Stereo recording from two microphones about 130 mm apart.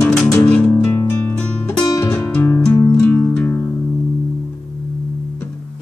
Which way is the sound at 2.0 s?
10° left (ahead or behind).